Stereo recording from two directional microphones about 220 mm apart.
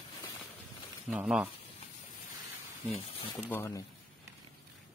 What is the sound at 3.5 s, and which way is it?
Speech, 10° left (ahead or behind).